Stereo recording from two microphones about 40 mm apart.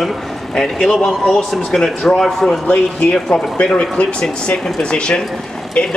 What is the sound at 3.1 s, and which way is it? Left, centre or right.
Speech, centre.